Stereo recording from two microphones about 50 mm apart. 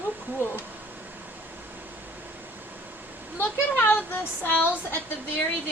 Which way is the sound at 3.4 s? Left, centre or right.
Left.